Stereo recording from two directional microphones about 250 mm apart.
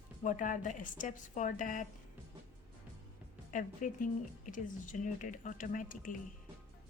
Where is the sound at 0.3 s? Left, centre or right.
Left.